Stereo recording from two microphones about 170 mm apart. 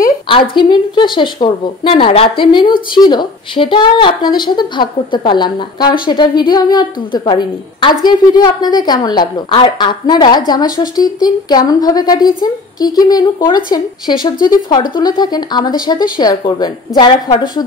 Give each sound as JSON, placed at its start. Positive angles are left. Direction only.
{"t": 0.6, "sound": "a woman's voice", "side_deg": 25}